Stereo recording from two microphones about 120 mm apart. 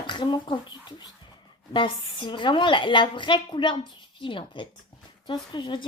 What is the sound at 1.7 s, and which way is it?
A woman's voice, 40° left (ahead or behind).